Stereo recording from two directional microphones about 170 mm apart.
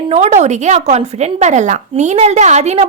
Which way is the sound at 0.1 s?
40° right (ahead or behind).